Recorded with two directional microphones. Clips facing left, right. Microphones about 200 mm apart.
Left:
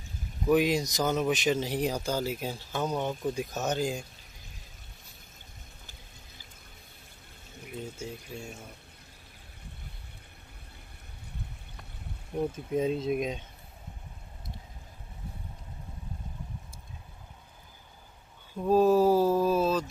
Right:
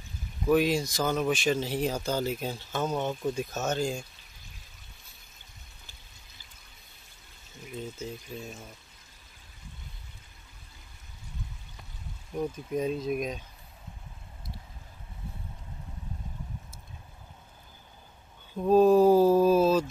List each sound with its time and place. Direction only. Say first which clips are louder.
0.5 s speech: even; 15° left (ahead or behind)
7.7 s speech: right 1 dB; 10° left (ahead or behind)
12.4 s speech: left 1 dB; 25° left (ahead or behind)
18.6 s mantra: right 3 dB; 5° left (ahead or behind)